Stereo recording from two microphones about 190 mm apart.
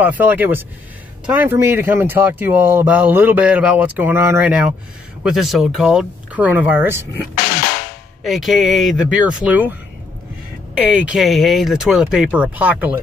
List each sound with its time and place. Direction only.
0.0 s speech: 10° right (ahead or behind)
7.6 s drum: 50° left (ahead or behind)
8.2 s speech: centre (ahead or behind)